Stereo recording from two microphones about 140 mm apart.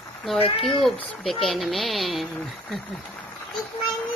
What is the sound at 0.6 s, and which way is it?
Speech, 5° left (ahead or behind).